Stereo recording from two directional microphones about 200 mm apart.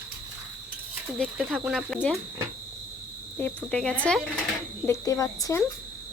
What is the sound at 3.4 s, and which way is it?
Speech, 5° left (ahead or behind).